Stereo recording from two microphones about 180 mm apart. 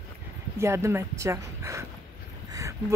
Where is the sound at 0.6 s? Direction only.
15° right (ahead or behind).